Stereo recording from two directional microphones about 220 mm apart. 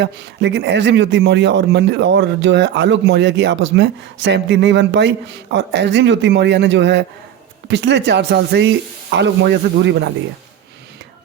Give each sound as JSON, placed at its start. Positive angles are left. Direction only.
{"t": 0.0, "sound": "speech", "side_deg": -55}